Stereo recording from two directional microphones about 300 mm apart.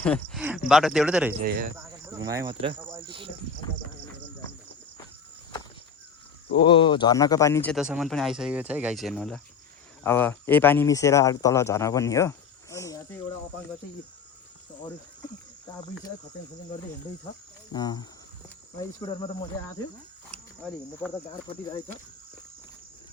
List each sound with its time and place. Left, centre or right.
0.0 s speech: centre
1.3 s speech: right
1.7 s speech: centre
6.5 s speech: centre
17.7 s speech: centre
20.3 s speech: centre
21.1 s speech: centre